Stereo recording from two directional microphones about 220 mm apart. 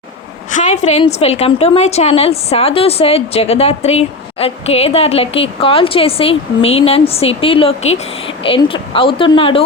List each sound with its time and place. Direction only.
0.5 s a woman's voice: 30° left (ahead or behind)